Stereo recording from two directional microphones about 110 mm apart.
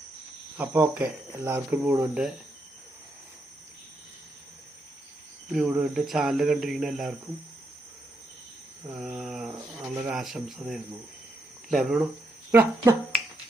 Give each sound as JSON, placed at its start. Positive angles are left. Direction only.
{"t": 0.5, "sound": "speech", "side_deg": -15}
{"t": 5.5, "sound": "speech", "side_deg": -5}
{"t": 8.9, "sound": "speech", "side_deg": -10}
{"t": 12.5, "sound": "speech", "side_deg": -20}